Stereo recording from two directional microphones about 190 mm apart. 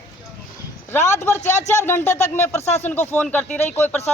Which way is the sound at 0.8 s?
10° left (ahead or behind).